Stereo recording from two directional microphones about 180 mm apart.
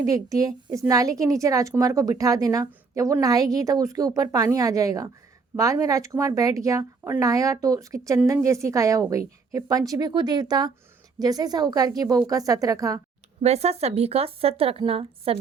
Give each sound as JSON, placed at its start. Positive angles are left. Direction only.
{"t": 0.0, "sound": "a woman's voice", "side_deg": -20}
{"t": 13.4, "sound": "speech", "side_deg": -35}